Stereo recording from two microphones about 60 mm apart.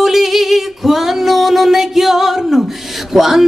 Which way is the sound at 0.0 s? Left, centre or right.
Centre.